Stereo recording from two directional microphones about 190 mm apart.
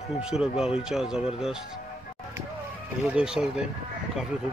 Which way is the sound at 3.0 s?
5° right (ahead or behind).